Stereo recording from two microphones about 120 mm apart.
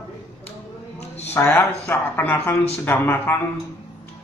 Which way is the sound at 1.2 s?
20° left (ahead or behind).